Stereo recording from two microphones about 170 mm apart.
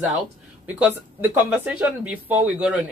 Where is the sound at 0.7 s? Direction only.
10° right (ahead or behind).